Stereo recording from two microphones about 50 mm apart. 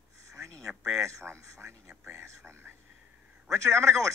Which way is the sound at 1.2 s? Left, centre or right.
Right.